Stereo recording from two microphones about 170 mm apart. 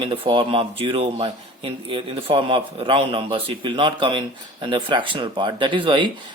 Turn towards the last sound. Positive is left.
turn(degrees=-30)  # may be behind; listen again after turning